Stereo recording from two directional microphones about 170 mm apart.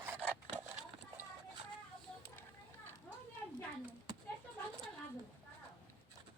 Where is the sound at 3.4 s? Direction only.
10° left (ahead or behind).